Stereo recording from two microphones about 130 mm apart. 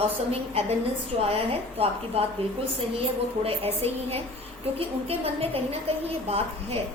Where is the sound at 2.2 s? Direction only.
50° right (ahead or behind).